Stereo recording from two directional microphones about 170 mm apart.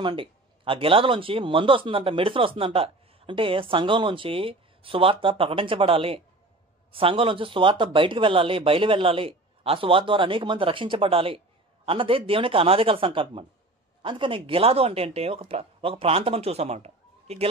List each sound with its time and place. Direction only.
0.0 s speech: 30° right (ahead or behind)